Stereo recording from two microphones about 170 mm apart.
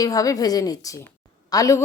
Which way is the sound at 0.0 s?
20° left (ahead or behind).